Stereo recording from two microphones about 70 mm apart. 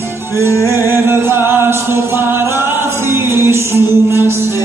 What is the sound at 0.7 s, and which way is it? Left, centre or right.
Music, right.